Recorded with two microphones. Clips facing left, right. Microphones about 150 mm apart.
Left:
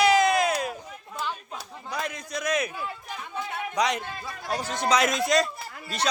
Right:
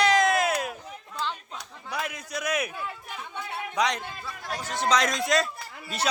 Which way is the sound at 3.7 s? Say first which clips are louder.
Left 1 dB; centre (ahead or behind).